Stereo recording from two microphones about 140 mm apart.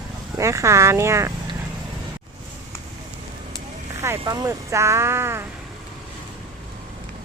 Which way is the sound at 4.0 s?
25° right (ahead or behind).